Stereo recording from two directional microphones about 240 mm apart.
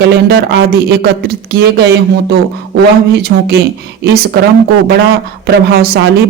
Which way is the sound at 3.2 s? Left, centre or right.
Right.